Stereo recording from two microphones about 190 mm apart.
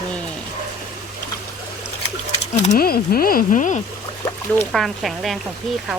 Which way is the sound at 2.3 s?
35° left (ahead or behind).